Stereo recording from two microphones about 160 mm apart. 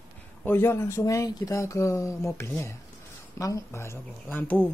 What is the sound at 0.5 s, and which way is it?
Speech, 15° left (ahead or behind).